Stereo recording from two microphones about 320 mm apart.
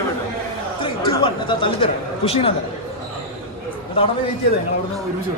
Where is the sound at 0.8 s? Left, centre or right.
Centre.